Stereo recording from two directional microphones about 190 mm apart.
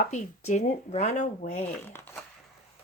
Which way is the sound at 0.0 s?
40° left (ahead or behind).